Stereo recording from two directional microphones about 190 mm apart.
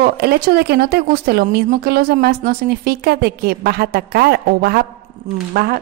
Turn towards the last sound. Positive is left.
turn(degrees=-55)  # may be behind; listen again after turning